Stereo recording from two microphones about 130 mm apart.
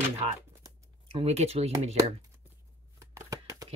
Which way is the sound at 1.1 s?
55° right (ahead or behind).